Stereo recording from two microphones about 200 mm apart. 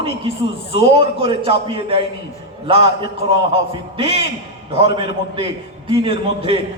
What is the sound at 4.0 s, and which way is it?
Speech, 30° right (ahead or behind).